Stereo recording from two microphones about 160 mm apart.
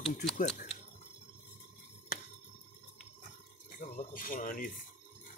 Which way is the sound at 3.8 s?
55° left (ahead or behind).